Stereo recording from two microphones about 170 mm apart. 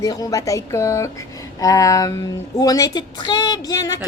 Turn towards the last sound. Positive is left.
turn(degrees=20)  # may be behind; listen again after turning